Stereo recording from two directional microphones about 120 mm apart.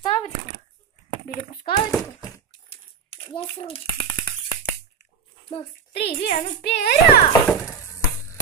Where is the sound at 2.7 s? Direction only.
55° left (ahead or behind).